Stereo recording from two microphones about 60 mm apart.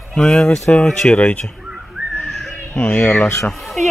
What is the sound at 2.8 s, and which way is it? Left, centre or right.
Speech, left.